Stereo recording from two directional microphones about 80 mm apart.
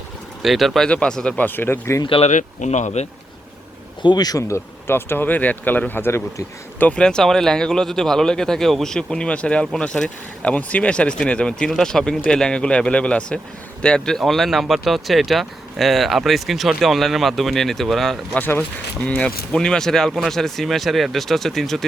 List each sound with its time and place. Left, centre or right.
0.4 s speech: centre
0.9 s speech: centre
1.4 s speech: left
4.0 s speech: left
6.8 s speech: centre
18.3 s speech: left
19.0 s speech: centre